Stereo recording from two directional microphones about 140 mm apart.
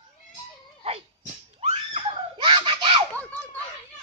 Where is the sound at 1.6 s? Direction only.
45° right (ahead or behind).